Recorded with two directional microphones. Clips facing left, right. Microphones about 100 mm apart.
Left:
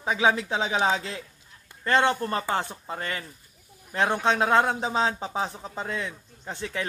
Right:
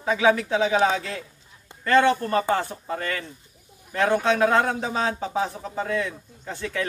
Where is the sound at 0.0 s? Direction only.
20° left (ahead or behind).